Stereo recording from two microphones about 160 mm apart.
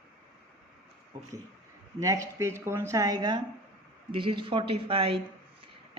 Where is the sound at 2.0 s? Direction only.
20° right (ahead or behind).